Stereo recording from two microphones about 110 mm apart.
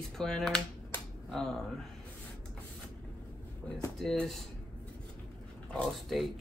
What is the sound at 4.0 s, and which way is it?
Speech, 5° left (ahead or behind).